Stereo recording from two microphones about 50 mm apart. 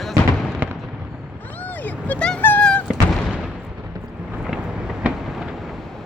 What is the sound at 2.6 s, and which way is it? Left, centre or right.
Thunk, left.